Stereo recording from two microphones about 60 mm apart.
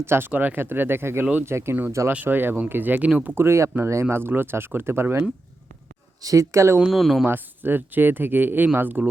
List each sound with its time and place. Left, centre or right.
0.0 s speech: right
0.3 s speech: right
1.2 s speech: right
1.5 s speech: right
3.3 s speech: right
4.1 s speech: right
6.2 s speech: right
6.8 s speech: centre
7.3 s speech: right